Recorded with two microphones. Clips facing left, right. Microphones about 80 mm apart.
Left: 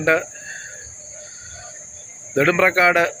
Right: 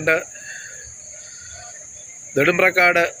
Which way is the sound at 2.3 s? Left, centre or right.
Left.